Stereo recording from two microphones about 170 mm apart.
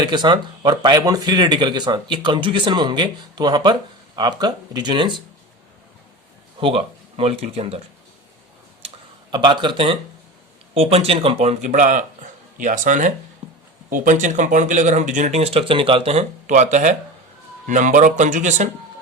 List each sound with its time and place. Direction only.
0.0 s speech: 25° right (ahead or behind)
6.6 s speech: 30° right (ahead or behind)
9.3 s speech: 25° right (ahead or behind); by 18.7 s 45° right (ahead or behind)